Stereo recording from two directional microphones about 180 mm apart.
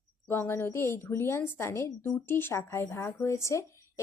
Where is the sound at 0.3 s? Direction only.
15° left (ahead or behind).